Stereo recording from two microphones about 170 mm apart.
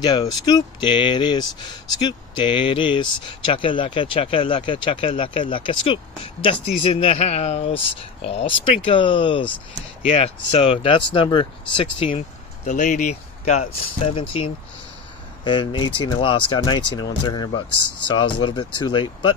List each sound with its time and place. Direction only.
0.0 s speech: 25° left (ahead or behind)
15.4 s speech: 30° left (ahead or behind)